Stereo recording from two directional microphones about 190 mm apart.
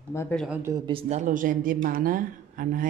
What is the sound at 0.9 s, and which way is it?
Speech, 30° right (ahead or behind).